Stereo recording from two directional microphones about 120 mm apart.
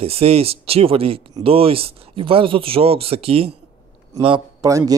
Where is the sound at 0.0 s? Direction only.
55° right (ahead or behind).